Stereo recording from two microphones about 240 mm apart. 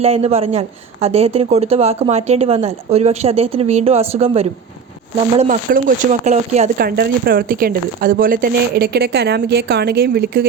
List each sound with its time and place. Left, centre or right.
0.0 s speech: right